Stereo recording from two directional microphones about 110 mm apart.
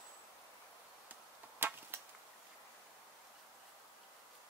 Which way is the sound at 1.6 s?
20° right (ahead or behind).